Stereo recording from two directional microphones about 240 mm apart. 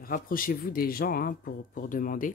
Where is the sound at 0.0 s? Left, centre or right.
Left.